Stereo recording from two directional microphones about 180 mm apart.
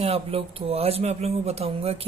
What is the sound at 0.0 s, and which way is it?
A woman's voice, 30° right (ahead or behind).